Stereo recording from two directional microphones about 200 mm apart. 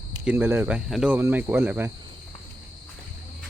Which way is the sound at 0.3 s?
10° right (ahead or behind).